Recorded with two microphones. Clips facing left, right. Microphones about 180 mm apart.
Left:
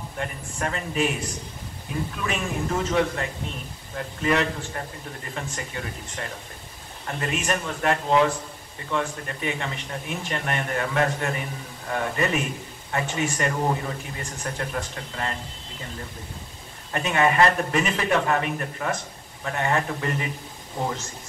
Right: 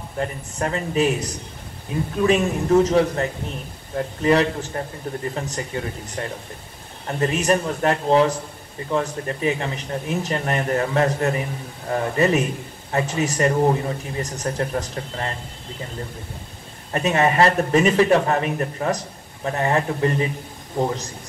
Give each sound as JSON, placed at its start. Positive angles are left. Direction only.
{"t": 0.2, "sound": "a man's voice", "side_deg": -35}
{"t": 7.1, "sound": "a man's voice", "side_deg": -35}
{"t": 16.9, "sound": "a man's voice", "side_deg": -35}